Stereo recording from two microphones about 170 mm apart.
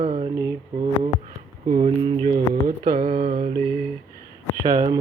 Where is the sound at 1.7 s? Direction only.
35° right (ahead or behind).